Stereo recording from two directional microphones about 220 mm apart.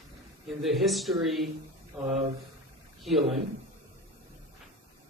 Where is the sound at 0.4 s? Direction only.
Centre (ahead or behind).